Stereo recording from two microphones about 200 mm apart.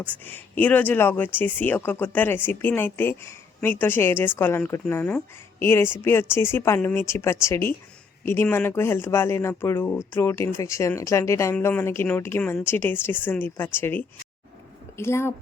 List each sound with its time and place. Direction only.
0.0 s speech: 10° left (ahead or behind)